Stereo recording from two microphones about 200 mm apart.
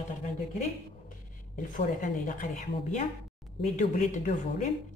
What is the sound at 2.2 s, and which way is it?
A woman's voice, 40° left (ahead or behind).